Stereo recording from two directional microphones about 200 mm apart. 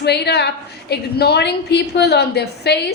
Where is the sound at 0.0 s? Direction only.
55° left (ahead or behind).